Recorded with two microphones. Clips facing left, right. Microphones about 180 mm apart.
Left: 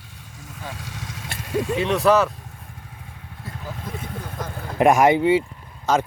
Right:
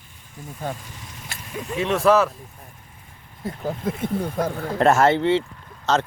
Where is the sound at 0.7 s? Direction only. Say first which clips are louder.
Left 5 dB; 90° left.